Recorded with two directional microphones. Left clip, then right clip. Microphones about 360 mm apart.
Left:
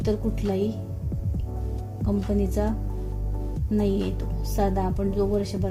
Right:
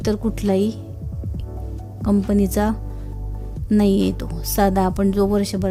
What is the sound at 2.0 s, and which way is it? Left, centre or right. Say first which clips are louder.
Speech: right 7 dB; right.